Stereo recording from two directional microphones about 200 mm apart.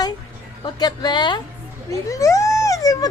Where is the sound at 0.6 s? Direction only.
20° left (ahead or behind).